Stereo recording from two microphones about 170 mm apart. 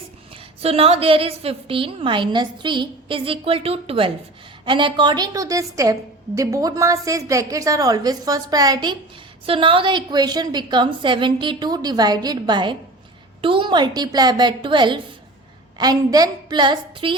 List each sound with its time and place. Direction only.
0.6 s a woman's voice: 35° right (ahead or behind)